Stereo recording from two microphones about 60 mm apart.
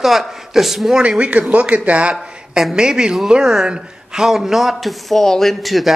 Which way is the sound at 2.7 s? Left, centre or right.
Centre.